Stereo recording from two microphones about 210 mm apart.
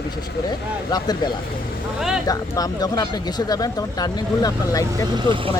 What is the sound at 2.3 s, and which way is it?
Speech, 15° left (ahead or behind).